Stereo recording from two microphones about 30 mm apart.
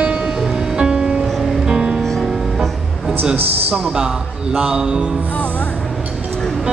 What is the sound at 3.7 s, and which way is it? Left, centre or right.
Speech, right.